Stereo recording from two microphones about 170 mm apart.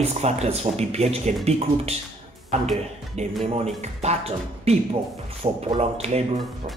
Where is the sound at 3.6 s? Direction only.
40° right (ahead or behind).